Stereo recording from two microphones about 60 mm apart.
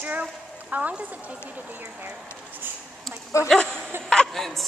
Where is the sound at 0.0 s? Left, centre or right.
Right.